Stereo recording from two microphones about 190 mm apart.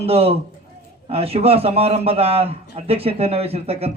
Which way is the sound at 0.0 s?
30° right (ahead or behind).